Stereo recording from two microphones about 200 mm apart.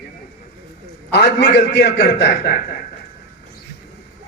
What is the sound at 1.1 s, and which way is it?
A man's voice, 55° left (ahead or behind).